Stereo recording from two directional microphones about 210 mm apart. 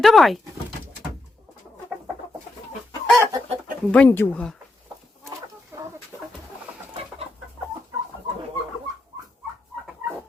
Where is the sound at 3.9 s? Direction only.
10° left (ahead or behind).